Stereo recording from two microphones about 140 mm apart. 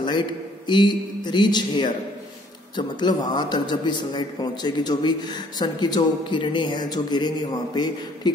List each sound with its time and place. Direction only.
0.0 s a man's voice: 35° left (ahead or behind)